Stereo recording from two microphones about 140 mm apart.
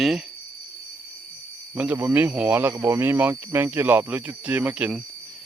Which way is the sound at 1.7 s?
10° right (ahead or behind).